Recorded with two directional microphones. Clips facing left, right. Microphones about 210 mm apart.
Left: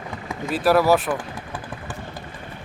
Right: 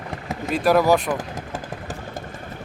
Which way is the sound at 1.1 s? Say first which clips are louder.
Right 1 dB; 40° right (ahead or behind).